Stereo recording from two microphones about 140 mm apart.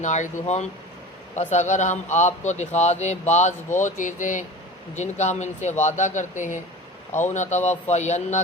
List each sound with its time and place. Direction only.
0.0 s speech: 60° left (ahead or behind)
7.1 s speech: 15° left (ahead or behind)
7.3 s speech: 55° left (ahead or behind)